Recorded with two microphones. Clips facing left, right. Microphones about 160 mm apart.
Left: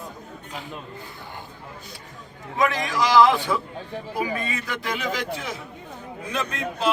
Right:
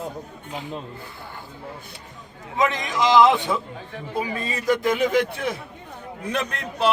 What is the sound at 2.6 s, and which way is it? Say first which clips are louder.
A man's voice: right 1 dB; 20° right (ahead or behind).